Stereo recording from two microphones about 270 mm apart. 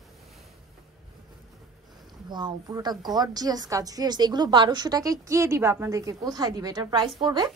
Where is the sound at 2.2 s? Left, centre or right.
Centre.